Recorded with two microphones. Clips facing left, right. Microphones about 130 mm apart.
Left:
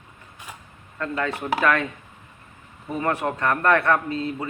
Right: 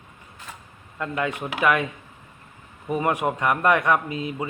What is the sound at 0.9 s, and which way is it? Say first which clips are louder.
Speech: even; 15° right (ahead or behind).